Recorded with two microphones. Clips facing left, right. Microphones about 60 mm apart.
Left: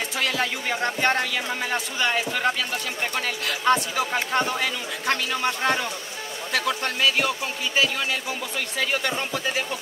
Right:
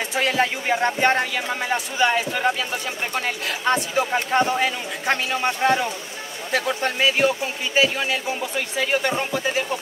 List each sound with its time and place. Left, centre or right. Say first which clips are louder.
0.1 s a sound: right 6 dB; right
0.8 s speech: right 2 dB; right
3.6 s speech: even; centre